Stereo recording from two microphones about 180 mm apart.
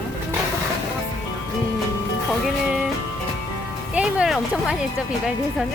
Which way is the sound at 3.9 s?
5° right (ahead or behind).